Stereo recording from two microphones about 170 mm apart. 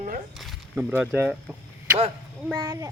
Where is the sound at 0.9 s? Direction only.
10° right (ahead or behind).